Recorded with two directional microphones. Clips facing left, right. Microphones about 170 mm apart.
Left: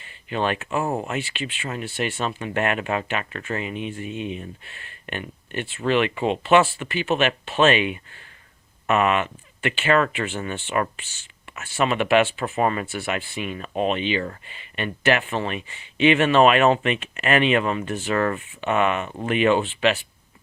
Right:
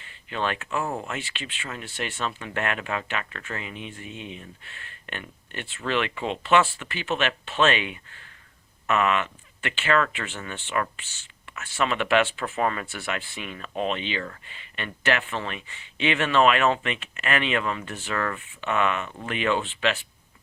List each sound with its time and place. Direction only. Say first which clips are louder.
0.3 s speech: left 4 dB; 15° left (ahead or behind)